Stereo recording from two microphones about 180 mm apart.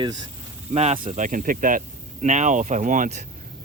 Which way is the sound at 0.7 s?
35° right (ahead or behind).